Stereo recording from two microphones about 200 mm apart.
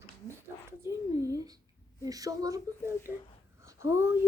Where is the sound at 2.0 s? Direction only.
15° right (ahead or behind).